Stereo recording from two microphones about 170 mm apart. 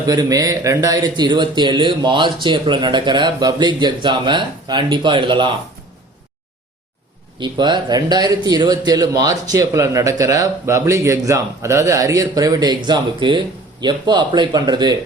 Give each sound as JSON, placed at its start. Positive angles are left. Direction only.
{"t": 0.1, "sound": "a man's voice", "side_deg": -20}
{"t": 7.3, "sound": "a man's voice", "side_deg": -25}